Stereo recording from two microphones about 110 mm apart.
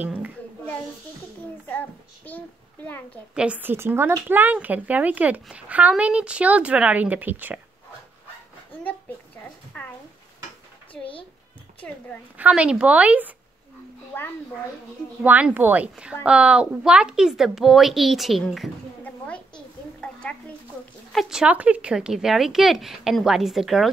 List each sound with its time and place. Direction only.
0.0 s a woman's voice: 15° right (ahead or behind)
1.7 s a child's voice: 15° left (ahead or behind)
3.3 s speech: 15° right (ahead or behind)
9.7 s a sound: 15° left (ahead or behind)
12.4 s speech: 10° right (ahead or behind)
15.2 s speech: 15° right (ahead or behind)
19.2 s a sound: 10° left (ahead or behind)
21.1 s speech: centre (ahead or behind)